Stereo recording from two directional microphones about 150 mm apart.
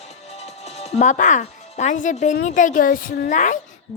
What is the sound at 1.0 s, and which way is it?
A woman's voice, 55° left (ahead or behind).